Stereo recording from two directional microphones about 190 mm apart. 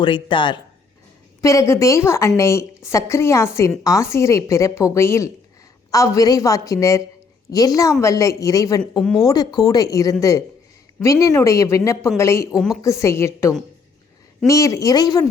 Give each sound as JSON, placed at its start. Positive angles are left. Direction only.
{"t": 0.0, "sound": "a woman's voice", "side_deg": 25}
{"t": 8.0, "sound": "a woman's voice", "side_deg": 15}
{"t": 8.8, "sound": "speech", "side_deg": 5}
{"t": 9.2, "sound": "a woman's voice", "side_deg": 20}
{"t": 12.5, "sound": "speech", "side_deg": 0}
{"t": 12.8, "sound": "a woman's voice", "side_deg": 15}